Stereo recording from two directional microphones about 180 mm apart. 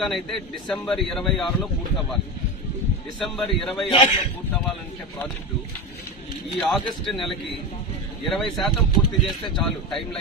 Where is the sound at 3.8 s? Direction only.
30° left (ahead or behind).